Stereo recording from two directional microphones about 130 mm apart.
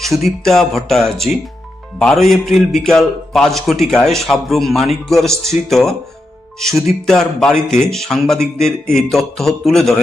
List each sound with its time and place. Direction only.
0.0 s a man's voice: centre (ahead or behind)